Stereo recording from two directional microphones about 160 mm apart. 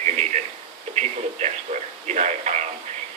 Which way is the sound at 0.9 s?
45° right (ahead or behind).